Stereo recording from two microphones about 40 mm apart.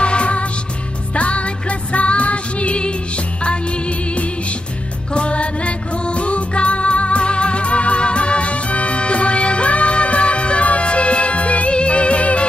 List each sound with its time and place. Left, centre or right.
0.0 s music: left
5.1 s music: left